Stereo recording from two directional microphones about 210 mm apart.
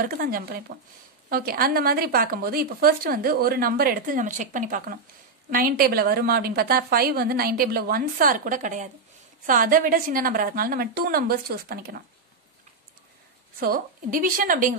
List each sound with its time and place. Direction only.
0.0 s a woman's voice: 45° right (ahead or behind)
13.6 s a woman's voice: 45° right (ahead or behind)